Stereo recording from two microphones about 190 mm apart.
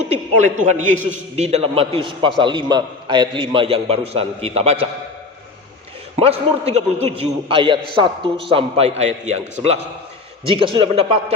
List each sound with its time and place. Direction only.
0.1 s a man's voice: 40° right (ahead or behind)
6.1 s a man's voice: 35° right (ahead or behind)